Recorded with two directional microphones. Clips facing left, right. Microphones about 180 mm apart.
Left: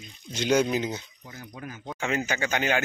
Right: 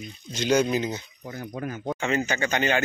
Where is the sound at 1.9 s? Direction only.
10° left (ahead or behind).